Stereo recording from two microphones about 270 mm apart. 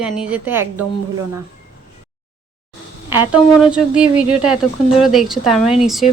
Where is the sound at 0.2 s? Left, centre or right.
Centre.